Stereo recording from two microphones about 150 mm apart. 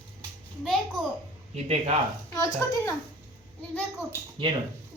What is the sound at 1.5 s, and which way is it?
Speech, 45° right (ahead or behind).